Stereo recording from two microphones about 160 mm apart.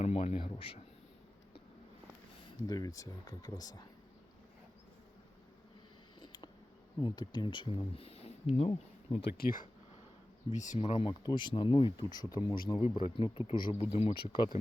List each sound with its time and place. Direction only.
0.0 s speech: 40° left (ahead or behind)
2.6 s speech: 25° left (ahead or behind)
6.1 s a sound: 30° left (ahead or behind)
7.0 s speech: 30° left (ahead or behind)
9.2 s speech: 70° left (ahead or behind)
10.5 s speech: 50° left (ahead or behind)
10.8 s speech: 35° left (ahead or behind)